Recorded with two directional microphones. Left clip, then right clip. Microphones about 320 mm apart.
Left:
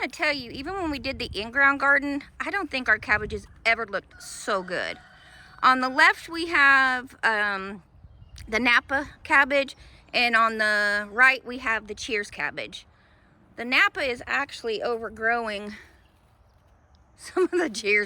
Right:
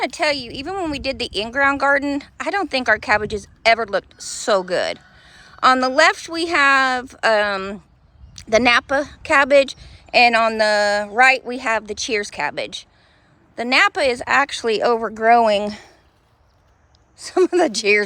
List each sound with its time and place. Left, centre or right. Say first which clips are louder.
0.0 s a woman's voice: right 6 dB; centre
17.2 s a woman's voice: right 8 dB; centre